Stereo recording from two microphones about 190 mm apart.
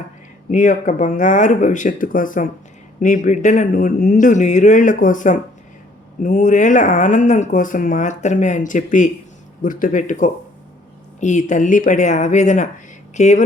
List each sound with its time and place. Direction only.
0.5 s speech: 45° left (ahead or behind)